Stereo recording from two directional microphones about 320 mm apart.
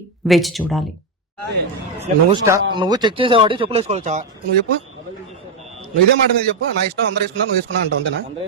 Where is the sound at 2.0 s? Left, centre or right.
Centre.